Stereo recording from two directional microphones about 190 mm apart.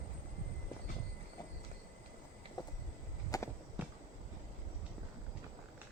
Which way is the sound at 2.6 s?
20° left (ahead or behind).